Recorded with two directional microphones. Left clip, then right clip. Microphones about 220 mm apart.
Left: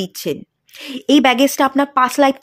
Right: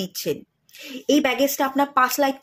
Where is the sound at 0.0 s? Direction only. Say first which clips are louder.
Left 4 dB; 30° left (ahead or behind).